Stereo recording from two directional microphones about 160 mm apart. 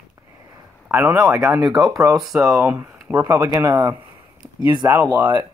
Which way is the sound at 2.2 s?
Centre (ahead or behind).